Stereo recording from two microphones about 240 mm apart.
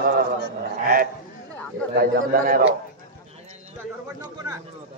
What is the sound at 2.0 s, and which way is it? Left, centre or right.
Speech, right.